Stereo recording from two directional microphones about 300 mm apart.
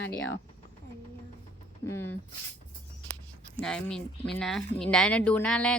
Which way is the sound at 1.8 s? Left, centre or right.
Centre.